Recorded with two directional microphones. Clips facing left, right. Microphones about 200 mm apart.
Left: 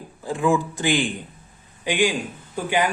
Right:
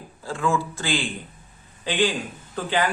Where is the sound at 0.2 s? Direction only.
15° left (ahead or behind).